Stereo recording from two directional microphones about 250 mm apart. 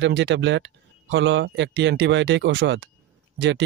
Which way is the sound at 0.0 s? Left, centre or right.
Right.